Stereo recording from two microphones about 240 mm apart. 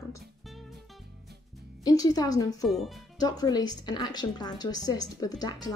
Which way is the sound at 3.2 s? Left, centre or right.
Centre.